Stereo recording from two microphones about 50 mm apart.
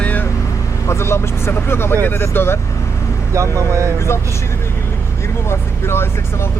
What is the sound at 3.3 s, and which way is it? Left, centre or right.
Speech, right.